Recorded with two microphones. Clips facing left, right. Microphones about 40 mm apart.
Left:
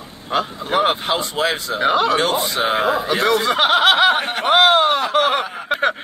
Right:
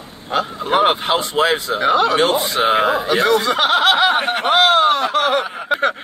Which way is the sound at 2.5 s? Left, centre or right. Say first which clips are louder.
Right 3 dB; centre.